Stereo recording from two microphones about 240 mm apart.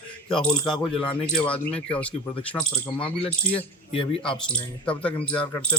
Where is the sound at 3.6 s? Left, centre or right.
Left.